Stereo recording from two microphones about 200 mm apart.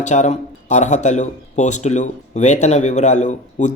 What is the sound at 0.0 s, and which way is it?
Speech, 35° left (ahead or behind).